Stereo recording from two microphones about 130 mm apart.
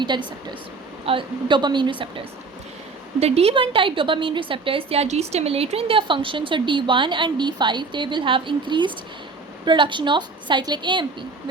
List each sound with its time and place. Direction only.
0.0 s a woman's voice: 35° right (ahead or behind)
3.2 s a woman's voice: 55° right (ahead or behind); by 11.0 s 35° right (ahead or behind)